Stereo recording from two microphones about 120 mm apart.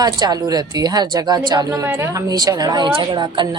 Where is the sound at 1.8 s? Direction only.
20° right (ahead or behind); by 3.4 s 40° right (ahead or behind).